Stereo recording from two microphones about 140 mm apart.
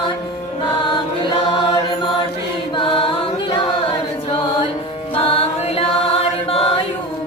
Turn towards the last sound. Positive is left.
turn(degrees=45)  # may be behind; listen again after turning